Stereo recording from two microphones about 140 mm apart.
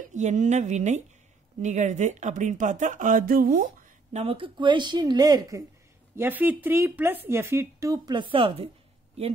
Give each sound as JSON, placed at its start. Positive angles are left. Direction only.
{"t": 0.1, "sound": "speech", "side_deg": -60}
{"t": 4.1, "sound": "a woman's voice", "side_deg": -45}
{"t": 6.1, "sound": "a woman's voice", "side_deg": -15}